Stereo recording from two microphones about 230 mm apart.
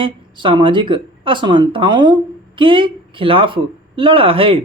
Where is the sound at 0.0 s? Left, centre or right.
Right.